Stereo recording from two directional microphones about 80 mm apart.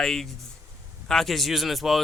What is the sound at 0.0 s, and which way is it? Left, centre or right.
A man's voice, centre.